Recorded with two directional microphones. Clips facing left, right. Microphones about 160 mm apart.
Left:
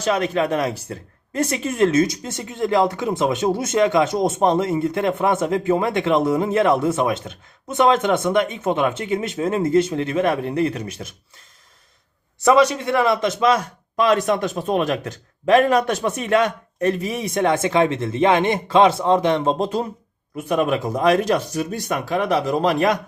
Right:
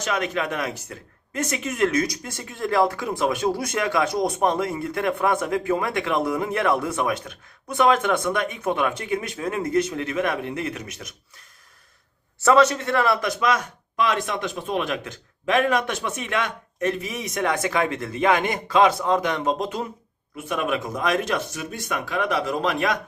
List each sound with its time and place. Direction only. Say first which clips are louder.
0.0 s speech: left 5 dB; 35° left (ahead or behind)
12.4 s speech: left 2 dB; 15° left (ahead or behind); by 23.0 s 40° left (ahead or behind)